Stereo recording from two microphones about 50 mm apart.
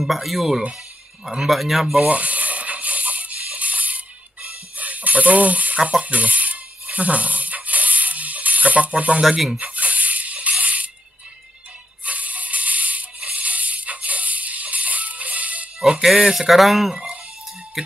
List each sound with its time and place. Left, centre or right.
0.0 s speech: centre
2.0 s a sound: right
9.6 s music: right
12.0 s mechanisms: right
16.3 s speech: centre